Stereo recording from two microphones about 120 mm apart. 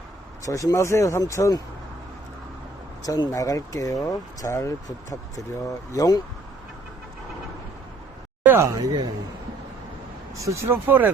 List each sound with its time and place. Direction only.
0.4 s speech: 30° left (ahead or behind)
3.0 s speech: 30° left (ahead or behind)
8.5 s speech: 25° right (ahead or behind)
10.4 s speech: 25° right (ahead or behind)